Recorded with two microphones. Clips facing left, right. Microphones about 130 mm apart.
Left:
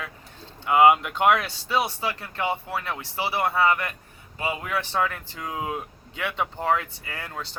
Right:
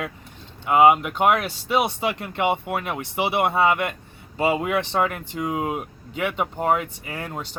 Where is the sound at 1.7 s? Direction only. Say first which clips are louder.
Right 3 dB; 20° right (ahead or behind).